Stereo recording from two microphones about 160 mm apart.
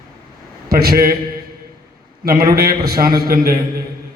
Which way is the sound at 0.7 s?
70° right (ahead or behind).